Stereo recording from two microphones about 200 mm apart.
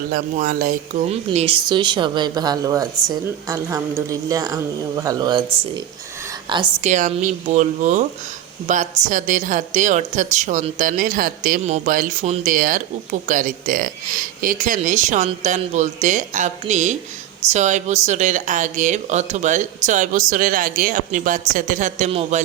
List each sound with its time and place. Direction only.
0.1 s speech: 45° right (ahead or behind)
1.1 s a woman's voice: 30° right (ahead or behind)
6.8 s speech: 35° right (ahead or behind)